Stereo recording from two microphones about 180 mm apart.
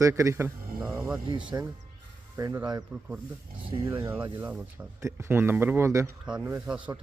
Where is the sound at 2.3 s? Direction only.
15° right (ahead or behind).